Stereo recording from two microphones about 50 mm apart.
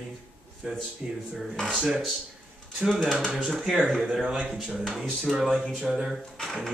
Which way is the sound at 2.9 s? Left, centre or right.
Centre.